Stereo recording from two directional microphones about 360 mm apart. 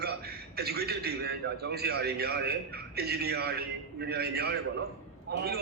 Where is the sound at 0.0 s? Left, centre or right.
Right.